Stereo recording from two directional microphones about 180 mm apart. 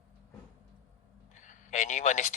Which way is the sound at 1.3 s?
45° left (ahead or behind).